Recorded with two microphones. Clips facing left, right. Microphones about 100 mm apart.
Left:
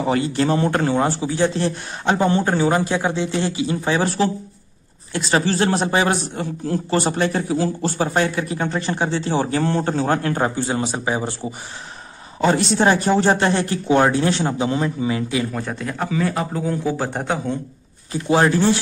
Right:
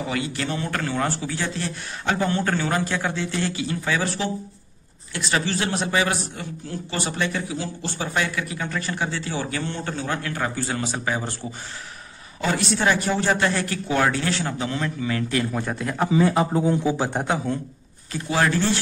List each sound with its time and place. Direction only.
0.1 s a man's voice: 35° left (ahead or behind)
10.5 s speech: 20° left (ahead or behind)
12.4 s speech: 30° left (ahead or behind); by 15.4 s 15° left (ahead or behind)
15.5 s a man's voice: centre (ahead or behind)
16.1 s a man's voice: 20° right (ahead or behind); by 17.6 s 5° right (ahead or behind)
18.3 s speech: 20° left (ahead or behind)